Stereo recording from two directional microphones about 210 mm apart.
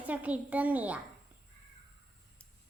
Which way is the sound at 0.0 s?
5° right (ahead or behind).